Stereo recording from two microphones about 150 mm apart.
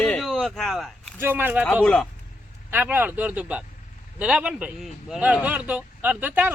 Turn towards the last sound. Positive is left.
turn(degrees=-10)  # may be behind; listen again after turning